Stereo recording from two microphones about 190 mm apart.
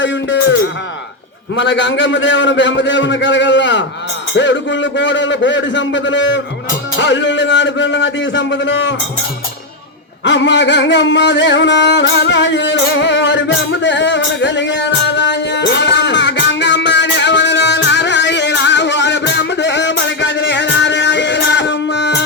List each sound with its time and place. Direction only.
0.0 s a man's voice: 75° left (ahead or behind)
1.5 s a man's voice: 70° left (ahead or behind)
10.2 s music: 70° left (ahead or behind)